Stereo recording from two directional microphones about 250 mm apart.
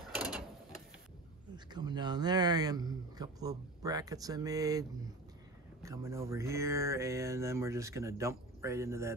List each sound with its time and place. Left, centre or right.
0.0 s mechanisms: centre
1.7 s speech: centre